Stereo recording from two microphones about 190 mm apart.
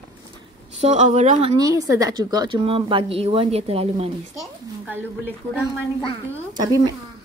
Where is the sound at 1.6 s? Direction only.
20° right (ahead or behind).